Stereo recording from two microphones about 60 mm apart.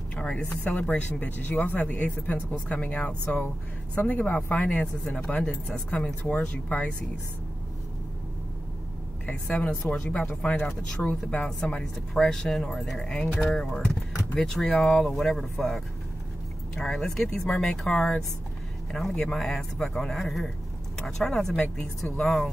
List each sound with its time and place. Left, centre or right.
0.1 s a sound: centre
0.4 s speech: left
5.3 s speech: centre
9.2 s speech: centre
10.6 s speech: centre